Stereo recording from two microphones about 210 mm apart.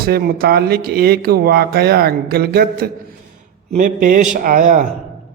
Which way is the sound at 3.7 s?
40° right (ahead or behind).